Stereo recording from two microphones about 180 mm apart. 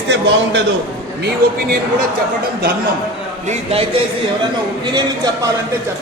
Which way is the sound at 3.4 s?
35° right (ahead or behind).